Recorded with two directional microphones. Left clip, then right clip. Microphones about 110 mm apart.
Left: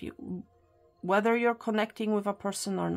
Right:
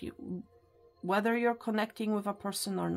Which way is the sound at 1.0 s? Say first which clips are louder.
Left 4 dB; 30° left (ahead or behind).